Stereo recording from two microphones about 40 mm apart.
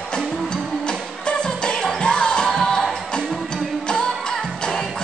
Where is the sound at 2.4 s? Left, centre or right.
Centre.